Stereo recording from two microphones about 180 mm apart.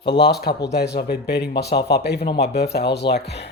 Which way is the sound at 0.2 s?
65° left (ahead or behind).